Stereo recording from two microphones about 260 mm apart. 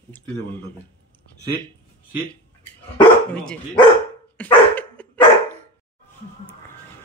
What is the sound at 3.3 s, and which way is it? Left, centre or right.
Speech, centre.